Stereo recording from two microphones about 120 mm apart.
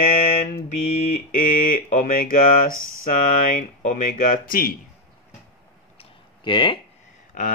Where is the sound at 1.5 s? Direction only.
90° left.